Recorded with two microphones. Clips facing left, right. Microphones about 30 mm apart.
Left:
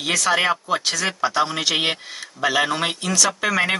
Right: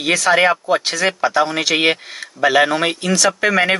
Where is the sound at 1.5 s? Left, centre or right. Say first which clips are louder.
Right 5 dB; right.